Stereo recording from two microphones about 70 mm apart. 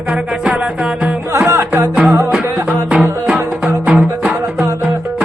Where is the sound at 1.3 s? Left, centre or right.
Right.